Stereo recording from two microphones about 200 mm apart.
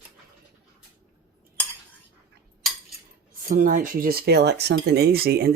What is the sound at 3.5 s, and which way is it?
Speech, 40° right (ahead or behind).